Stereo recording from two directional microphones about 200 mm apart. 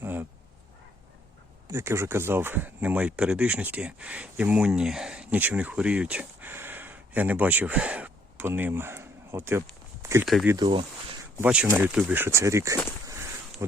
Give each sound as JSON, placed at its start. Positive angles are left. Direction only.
{"t": 0.0, "sound": "dog", "side_deg": -10}
{"t": 1.6, "sound": "speech", "side_deg": -15}
{"t": 10.2, "sound": "speech", "side_deg": 0}
{"t": 10.5, "sound": "speech", "side_deg": -25}
{"t": 11.3, "sound": "speech", "side_deg": -5}
{"t": 13.1, "sound": "a sound", "side_deg": -15}